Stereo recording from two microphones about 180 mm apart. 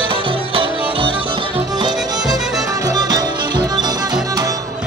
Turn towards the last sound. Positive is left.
turn(degrees=-20)  # may be behind; listen again after turning